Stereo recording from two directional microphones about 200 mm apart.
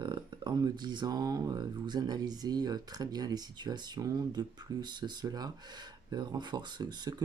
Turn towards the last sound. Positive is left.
turn(degrees=-20)  # may be behind; listen again after turning